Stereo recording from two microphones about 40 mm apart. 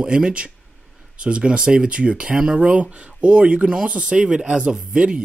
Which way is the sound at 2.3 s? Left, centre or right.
Centre.